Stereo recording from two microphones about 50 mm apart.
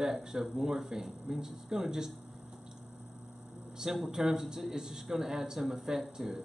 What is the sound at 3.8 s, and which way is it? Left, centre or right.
Speech, centre.